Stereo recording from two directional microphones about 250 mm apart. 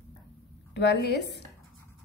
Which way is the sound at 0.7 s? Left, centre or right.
Left.